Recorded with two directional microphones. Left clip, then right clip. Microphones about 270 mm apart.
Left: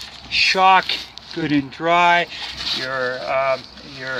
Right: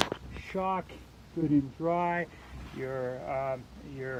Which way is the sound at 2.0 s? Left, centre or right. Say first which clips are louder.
Left 16 dB; centre.